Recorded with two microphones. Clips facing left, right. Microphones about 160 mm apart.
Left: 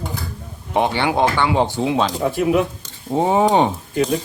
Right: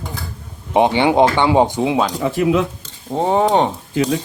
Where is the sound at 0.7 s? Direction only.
20° right (ahead or behind).